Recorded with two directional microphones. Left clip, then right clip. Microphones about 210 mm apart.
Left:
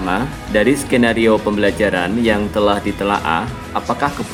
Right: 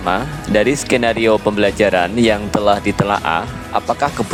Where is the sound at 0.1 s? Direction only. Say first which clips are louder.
Right 3 dB; 50° right (ahead or behind).